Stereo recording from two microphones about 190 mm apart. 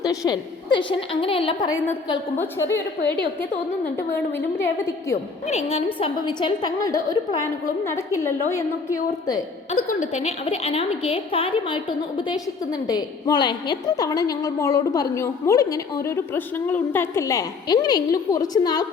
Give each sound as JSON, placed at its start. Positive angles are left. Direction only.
{"t": 0.0, "sound": "a woman's voice", "side_deg": 20}
{"t": 2.4, "sound": "a woman's voice", "side_deg": 15}
{"t": 3.9, "sound": "a woman's voice", "side_deg": 10}
{"t": 5.5, "sound": "a woman's voice", "side_deg": 35}
{"t": 10.0, "sound": "a woman's voice", "side_deg": 35}